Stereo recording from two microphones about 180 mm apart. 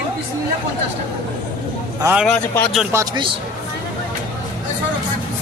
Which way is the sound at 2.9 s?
20° right (ahead or behind).